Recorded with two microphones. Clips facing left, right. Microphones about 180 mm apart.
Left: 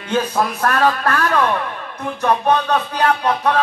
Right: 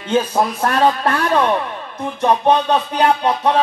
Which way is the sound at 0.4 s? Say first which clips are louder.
Even; 25° right (ahead or behind).